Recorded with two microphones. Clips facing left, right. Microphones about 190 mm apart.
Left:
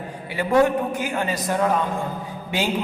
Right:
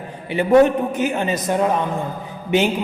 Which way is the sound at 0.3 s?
20° right (ahead or behind).